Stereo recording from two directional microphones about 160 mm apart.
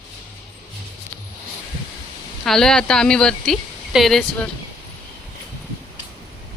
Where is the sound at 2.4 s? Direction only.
5° left (ahead or behind).